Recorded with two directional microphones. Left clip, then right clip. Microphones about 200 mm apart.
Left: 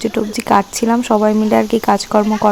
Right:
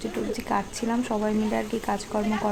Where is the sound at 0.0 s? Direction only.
40° left (ahead or behind).